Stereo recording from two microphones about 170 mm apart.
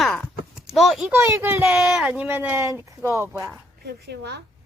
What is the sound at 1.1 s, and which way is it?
Speech, 15° right (ahead or behind).